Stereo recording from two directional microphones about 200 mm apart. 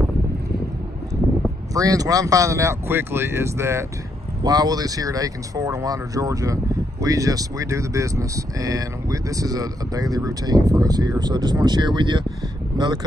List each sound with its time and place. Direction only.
1.7 s speech: 15° right (ahead or behind)